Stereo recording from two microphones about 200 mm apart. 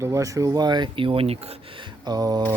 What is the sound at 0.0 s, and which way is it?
Speech, 15° right (ahead or behind).